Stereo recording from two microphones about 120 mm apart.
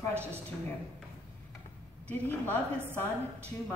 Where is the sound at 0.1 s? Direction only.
20° right (ahead or behind).